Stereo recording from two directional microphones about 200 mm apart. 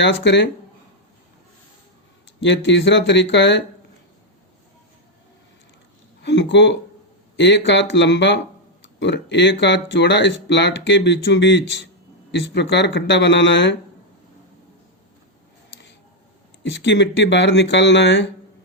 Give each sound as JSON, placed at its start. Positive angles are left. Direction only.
{"t": 0.0, "sound": "speech", "side_deg": 60}
{"t": 2.4, "sound": "speech", "side_deg": 65}
{"t": 6.2, "sound": "speech", "side_deg": 65}
{"t": 16.7, "sound": "speech", "side_deg": 65}